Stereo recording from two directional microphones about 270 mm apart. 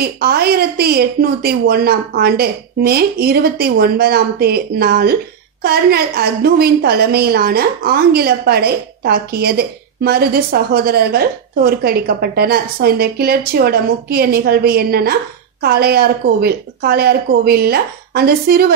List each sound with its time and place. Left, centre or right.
0.0 s a woman's voice: right